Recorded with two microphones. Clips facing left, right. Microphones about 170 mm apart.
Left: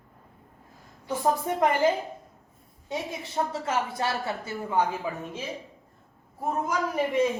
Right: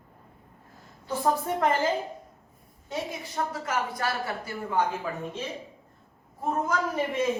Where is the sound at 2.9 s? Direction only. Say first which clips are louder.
Even; 25° left (ahead or behind).